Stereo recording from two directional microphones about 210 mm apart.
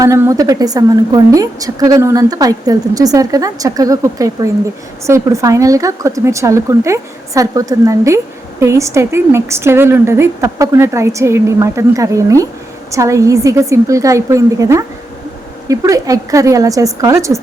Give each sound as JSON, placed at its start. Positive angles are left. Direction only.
{"t": 0.0, "sound": "a woman's voice", "side_deg": -15}